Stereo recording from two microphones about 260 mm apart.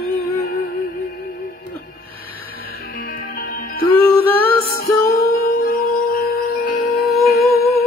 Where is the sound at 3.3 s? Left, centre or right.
Left.